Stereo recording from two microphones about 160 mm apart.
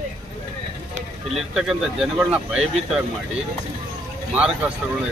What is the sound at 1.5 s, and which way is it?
Speech, 5° right (ahead or behind).